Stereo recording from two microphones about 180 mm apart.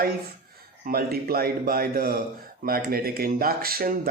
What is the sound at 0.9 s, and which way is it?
Speech, 55° right (ahead or behind).